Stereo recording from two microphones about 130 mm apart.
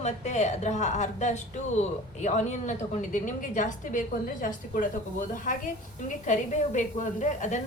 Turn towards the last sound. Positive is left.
turn(degrees=70)  # may be behind; listen again after turning